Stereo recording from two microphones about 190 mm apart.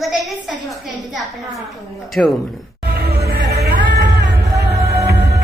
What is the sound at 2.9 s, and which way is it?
Music, 55° right (ahead or behind).